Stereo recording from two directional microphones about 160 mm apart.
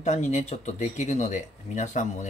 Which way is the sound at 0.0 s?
45° left (ahead or behind).